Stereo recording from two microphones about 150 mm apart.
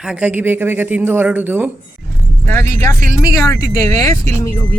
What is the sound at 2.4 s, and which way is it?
Speech, 15° left (ahead or behind).